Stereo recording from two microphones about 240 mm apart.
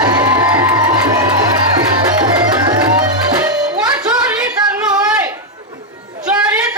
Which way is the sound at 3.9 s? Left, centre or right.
Centre.